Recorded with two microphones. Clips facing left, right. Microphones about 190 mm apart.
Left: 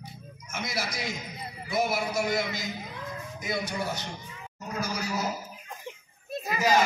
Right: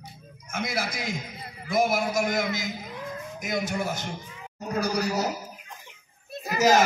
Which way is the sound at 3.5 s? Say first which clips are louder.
Right 3 dB; 45° right (ahead or behind).